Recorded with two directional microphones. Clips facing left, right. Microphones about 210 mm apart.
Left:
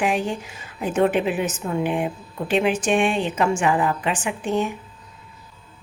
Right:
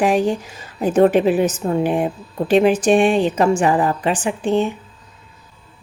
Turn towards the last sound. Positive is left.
turn(degrees=-30)  # may be behind; listen again after turning